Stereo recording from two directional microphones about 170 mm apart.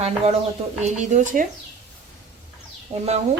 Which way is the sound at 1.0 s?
45° right (ahead or behind).